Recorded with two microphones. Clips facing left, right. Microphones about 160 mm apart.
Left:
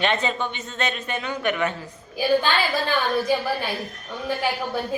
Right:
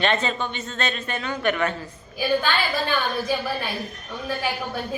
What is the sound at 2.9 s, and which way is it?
Speech, 25° left (ahead or behind).